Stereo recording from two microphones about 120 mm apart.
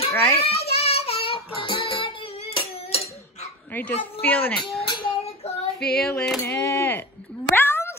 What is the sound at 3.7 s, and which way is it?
Speech, 15° left (ahead or behind).